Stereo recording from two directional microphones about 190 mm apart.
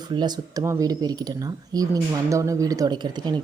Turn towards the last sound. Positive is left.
turn(degrees=-25)  # may be behind; listen again after turning